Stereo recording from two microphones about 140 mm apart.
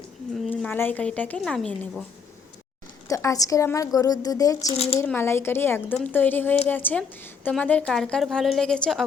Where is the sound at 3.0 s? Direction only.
25° left (ahead or behind).